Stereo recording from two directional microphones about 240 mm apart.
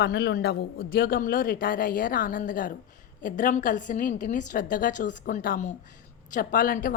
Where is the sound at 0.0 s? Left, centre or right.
Left.